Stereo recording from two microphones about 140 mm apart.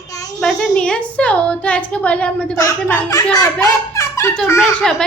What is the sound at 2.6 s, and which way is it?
A child's voice, 20° left (ahead or behind).